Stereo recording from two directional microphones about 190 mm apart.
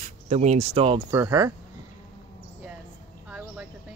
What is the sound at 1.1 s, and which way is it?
Speech, 15° right (ahead or behind).